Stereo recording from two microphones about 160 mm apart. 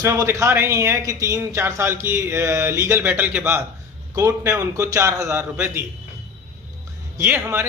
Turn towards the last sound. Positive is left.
turn(degrees=-15)  # may be behind; listen again after turning